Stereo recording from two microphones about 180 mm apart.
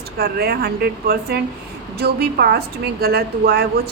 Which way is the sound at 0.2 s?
60° right (ahead or behind).